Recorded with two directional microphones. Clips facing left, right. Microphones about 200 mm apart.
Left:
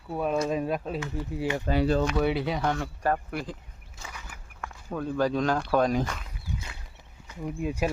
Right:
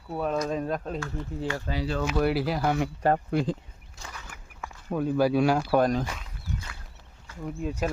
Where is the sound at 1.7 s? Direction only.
55° left (ahead or behind).